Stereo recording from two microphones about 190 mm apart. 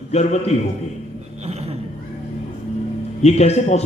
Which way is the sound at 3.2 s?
35° left (ahead or behind).